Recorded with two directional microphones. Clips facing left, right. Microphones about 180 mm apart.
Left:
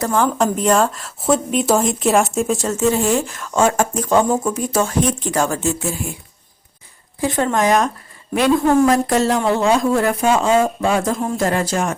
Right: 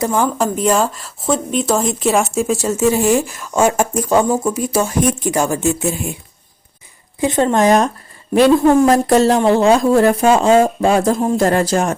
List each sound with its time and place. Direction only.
0.0 s speech: 10° right (ahead or behind)
7.2 s speech: 20° right (ahead or behind)